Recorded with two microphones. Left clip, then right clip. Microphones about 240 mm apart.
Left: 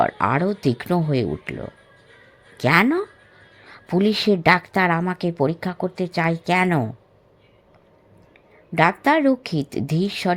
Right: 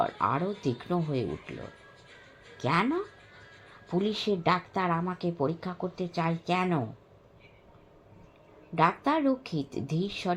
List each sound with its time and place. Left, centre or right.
0.0 s a woman's voice: left
8.7 s a woman's voice: left